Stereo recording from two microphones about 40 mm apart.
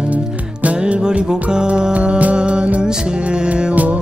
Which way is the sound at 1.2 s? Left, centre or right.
Centre.